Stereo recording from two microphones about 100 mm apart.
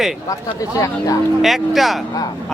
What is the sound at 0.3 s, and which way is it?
Speech, 35° left (ahead or behind).